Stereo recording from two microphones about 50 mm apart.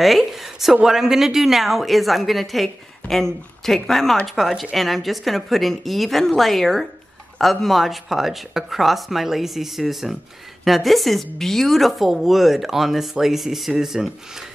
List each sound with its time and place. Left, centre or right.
0.0 s speech: centre